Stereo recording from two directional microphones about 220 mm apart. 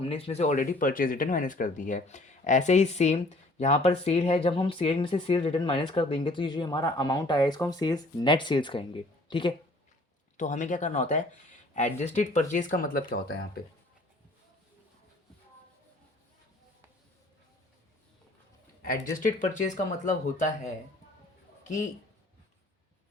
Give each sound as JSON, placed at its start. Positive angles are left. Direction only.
{"t": 0.0, "sound": "speech", "side_deg": 25}
{"t": 10.3, "sound": "speech", "side_deg": 35}
{"t": 18.9, "sound": "speech", "side_deg": 35}